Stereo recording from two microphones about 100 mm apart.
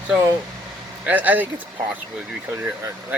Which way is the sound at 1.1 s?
15° right (ahead or behind).